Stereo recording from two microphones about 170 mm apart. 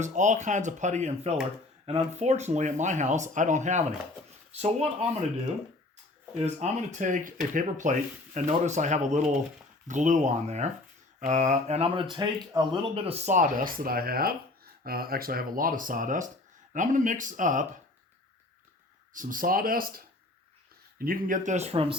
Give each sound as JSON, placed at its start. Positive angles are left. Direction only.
{"t": 0.0, "sound": "speech", "side_deg": -45}
{"t": 6.4, "sound": "speech", "side_deg": -45}
{"t": 12.1, "sound": "speech", "side_deg": -25}
{"t": 19.1, "sound": "speech", "side_deg": -50}
{"t": 21.0, "sound": "speech", "side_deg": -55}